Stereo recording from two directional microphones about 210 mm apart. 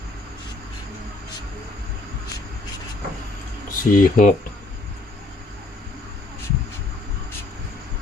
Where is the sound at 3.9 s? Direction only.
35° left (ahead or behind).